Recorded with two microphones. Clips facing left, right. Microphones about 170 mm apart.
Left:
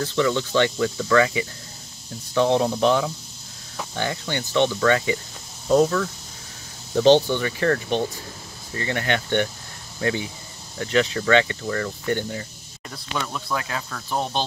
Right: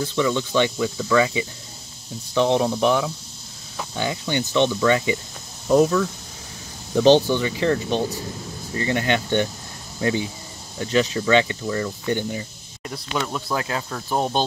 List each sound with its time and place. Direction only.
0.0 s speech: 15° right (ahead or behind)
7.2 s speech: 15° right (ahead or behind)
13.6 s speech: 25° right (ahead or behind)
13.8 s speech: 10° right (ahead or behind)